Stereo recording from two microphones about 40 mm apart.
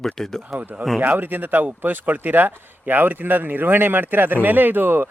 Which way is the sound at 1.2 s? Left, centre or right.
Right.